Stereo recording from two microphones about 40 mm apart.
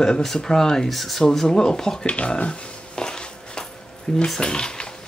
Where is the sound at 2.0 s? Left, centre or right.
Left.